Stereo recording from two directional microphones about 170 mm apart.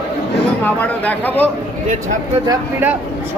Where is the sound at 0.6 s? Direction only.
10° left (ahead or behind).